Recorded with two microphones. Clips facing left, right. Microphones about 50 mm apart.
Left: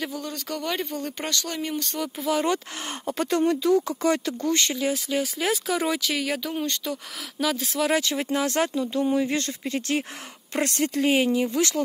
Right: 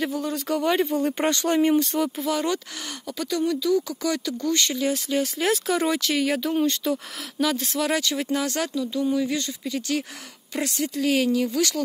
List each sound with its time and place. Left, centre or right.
0.0 s speech: centre
1.2 s speech: right
1.8 s speech: centre
3.1 s speech: left
4.7 s speech: centre
8.0 s speech: centre
9.4 s speech: left
11.1 s speech: left